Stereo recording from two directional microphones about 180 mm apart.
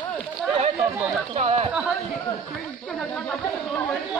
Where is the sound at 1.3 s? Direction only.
35° right (ahead or behind).